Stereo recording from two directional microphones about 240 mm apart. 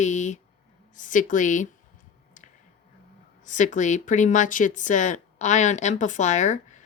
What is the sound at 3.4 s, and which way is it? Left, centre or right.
A woman's voice, left.